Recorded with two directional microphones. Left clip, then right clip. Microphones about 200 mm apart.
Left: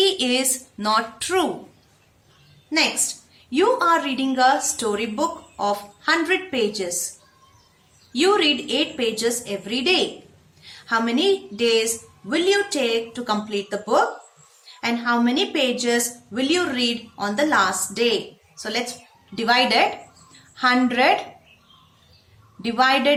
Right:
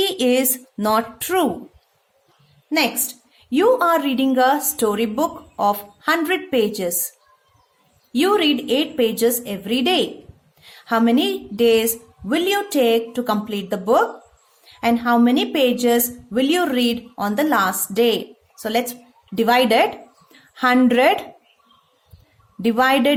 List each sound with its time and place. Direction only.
0.0 s a woman's voice: 45° right (ahead or behind)
3.5 s a woman's voice: 50° right (ahead or behind)
8.1 s a woman's voice: 50° right (ahead or behind)
22.6 s a woman's voice: 45° right (ahead or behind)